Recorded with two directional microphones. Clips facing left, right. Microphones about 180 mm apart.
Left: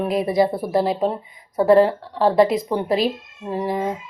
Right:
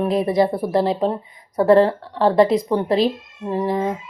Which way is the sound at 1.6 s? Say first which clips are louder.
Right 1 dB; 10° left (ahead or behind).